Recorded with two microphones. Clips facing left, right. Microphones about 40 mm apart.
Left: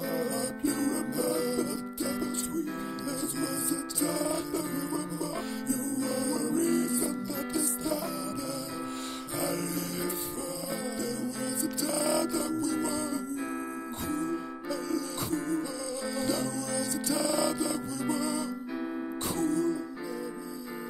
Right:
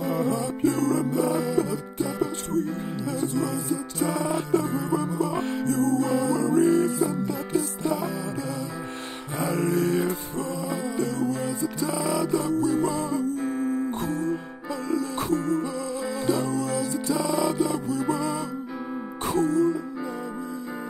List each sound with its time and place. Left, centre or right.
0.0 s music: right
3.1 s music: right
6.6 s music: right
6.9 s music: right
9.4 s music: right
11.6 s music: centre
12.3 s music: right
13.4 s music: left
15.2 s music: right
16.2 s music: right
17.1 s music: centre
17.6 s music: right